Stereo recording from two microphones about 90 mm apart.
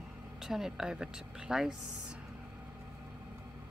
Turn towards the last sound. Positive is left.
turn(degrees=-5)  # may be behind; listen again after turning